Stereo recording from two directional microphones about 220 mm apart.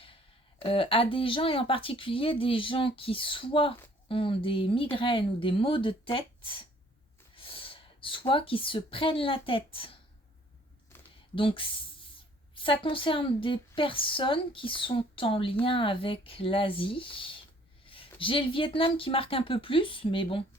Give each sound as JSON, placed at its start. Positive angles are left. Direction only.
{"t": 0.6, "sound": "a woman's voice", "side_deg": 25}
{"t": 7.3, "sound": "gasp", "side_deg": 25}
{"t": 8.3, "sound": "a woman's voice", "side_deg": 25}
{"t": 11.3, "sound": "a woman's voice", "side_deg": 25}